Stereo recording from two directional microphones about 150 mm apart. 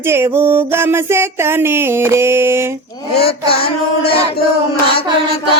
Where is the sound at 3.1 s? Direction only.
90° left.